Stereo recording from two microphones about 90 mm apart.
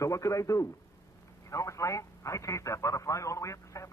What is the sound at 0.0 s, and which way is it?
A man's voice, 35° left (ahead or behind).